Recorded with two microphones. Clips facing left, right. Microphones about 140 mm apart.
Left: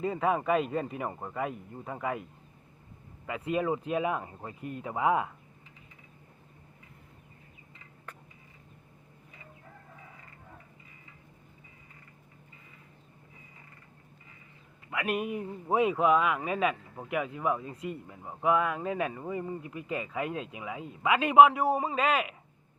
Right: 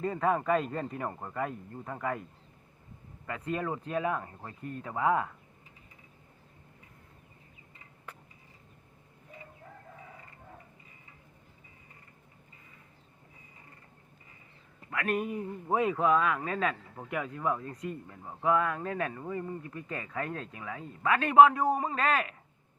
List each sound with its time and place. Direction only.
0.0 s a man's voice: 10° left (ahead or behind)
3.2 s a man's voice: 10° left (ahead or behind)
8.1 s a sound: 10° right (ahead or behind)
14.8 s a man's voice: 10° left (ahead or behind)